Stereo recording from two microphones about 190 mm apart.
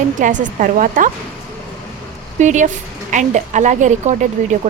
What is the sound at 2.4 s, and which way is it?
Speech, 40° right (ahead or behind).